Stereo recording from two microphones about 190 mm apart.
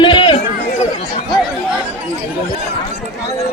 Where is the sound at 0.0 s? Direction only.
25° left (ahead or behind).